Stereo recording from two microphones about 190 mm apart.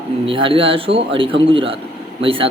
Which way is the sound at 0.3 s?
30° right (ahead or behind).